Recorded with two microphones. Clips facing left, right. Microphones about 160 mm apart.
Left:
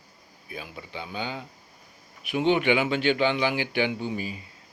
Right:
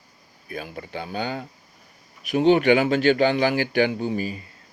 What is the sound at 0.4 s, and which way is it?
Speech, 55° right (ahead or behind).